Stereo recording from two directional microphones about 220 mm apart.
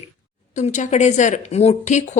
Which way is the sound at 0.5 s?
35° left (ahead or behind).